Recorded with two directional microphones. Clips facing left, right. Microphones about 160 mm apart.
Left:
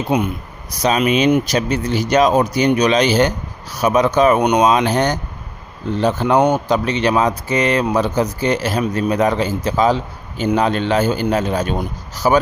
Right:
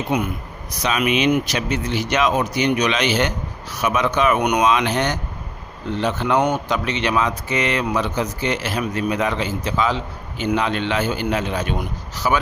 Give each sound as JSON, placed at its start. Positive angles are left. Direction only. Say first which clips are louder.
{"t": 0.1, "sound": "speech", "louder": "left 4 dB", "side_deg": 25}
{"t": 0.7, "sound": "speech", "louder": "left 5 dB", "side_deg": 35}